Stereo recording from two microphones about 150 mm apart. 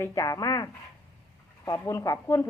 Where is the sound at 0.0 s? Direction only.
20° left (ahead or behind).